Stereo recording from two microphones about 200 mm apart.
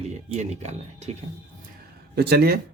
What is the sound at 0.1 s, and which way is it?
Speech, 35° right (ahead or behind).